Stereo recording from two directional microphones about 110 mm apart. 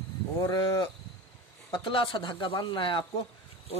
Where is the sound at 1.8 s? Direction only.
50° left (ahead or behind).